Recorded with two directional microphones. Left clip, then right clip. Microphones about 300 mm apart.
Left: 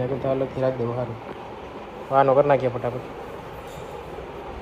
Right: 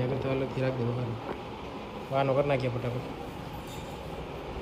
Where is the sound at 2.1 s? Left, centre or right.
Left.